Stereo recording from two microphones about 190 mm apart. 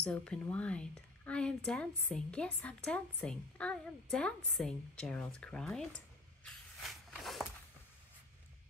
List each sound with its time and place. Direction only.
0.0 s speech: 5° left (ahead or behind)